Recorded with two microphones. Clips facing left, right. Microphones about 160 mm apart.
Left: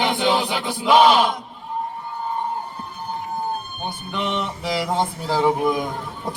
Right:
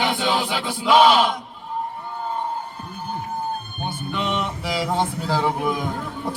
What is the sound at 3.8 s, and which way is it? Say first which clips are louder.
A man's voice: right 1 dB; 15° left (ahead or behind).